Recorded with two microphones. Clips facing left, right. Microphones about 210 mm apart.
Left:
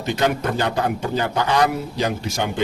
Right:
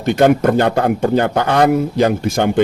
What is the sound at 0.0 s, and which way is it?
Speech, 55° right (ahead or behind).